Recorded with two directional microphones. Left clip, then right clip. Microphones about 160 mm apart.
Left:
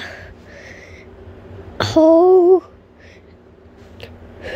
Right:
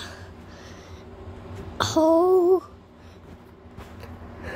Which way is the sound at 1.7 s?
30° left (ahead or behind).